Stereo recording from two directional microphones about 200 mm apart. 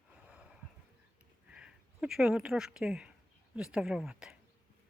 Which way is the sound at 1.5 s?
5° right (ahead or behind).